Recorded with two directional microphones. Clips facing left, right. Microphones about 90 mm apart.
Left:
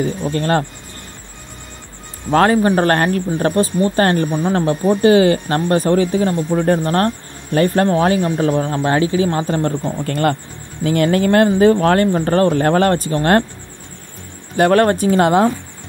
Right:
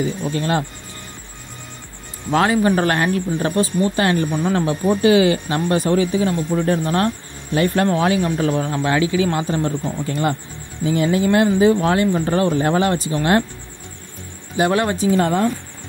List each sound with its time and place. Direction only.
0.0 s speech: 45° left (ahead or behind)
2.3 s speech: 40° left (ahead or behind)
10.0 s speech: 60° left (ahead or behind)
14.6 s speech: 50° left (ahead or behind)
15.1 s speech: 90° left